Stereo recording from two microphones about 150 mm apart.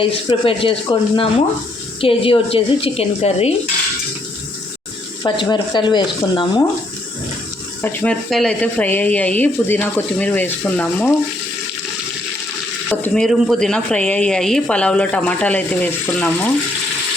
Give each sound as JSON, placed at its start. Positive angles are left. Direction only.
{"t": 0.0, "sound": "a woman's voice", "side_deg": 35}
{"t": 5.2, "sound": "a woman's voice", "side_deg": 30}
{"t": 7.8, "sound": "speech", "side_deg": 5}
{"t": 12.9, "sound": "speech", "side_deg": 10}